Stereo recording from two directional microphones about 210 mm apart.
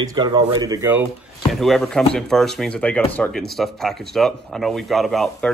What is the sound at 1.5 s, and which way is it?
Speech, centre (ahead or behind).